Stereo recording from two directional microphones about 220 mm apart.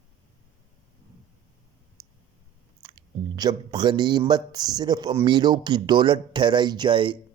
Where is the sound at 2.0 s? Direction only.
15° right (ahead or behind).